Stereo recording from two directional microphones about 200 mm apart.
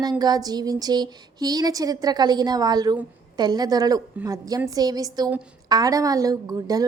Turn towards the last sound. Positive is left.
turn(degrees=-15)  # may be behind; listen again after turning